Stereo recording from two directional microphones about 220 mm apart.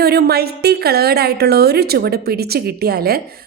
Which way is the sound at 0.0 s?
45° right (ahead or behind).